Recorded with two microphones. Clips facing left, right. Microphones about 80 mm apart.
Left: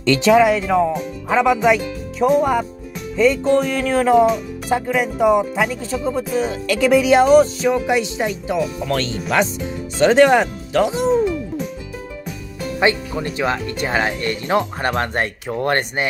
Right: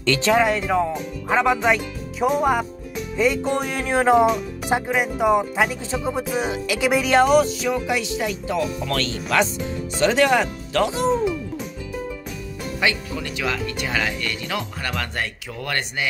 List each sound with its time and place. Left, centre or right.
0.0 s speech: centre
0.3 s speech: centre
3.2 s music: centre
4.6 s speech: centre
4.9 s speech: centre
5.9 s music: centre
7.3 s speech: left
10.7 s speech: centre
12.8 s speech: left